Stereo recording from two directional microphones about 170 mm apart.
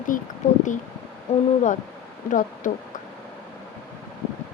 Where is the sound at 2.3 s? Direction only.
50° left (ahead or behind).